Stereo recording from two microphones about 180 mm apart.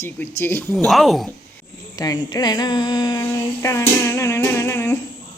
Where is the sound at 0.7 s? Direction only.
Centre (ahead or behind).